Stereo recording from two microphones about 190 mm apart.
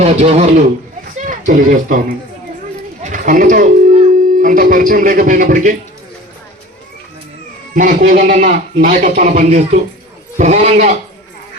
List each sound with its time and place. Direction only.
0.0 s a man's voice: 35° right (ahead or behind)
7.8 s a man's voice: 45° right (ahead or behind)